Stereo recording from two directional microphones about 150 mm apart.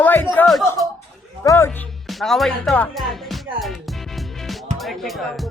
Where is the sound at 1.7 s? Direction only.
5° left (ahead or behind).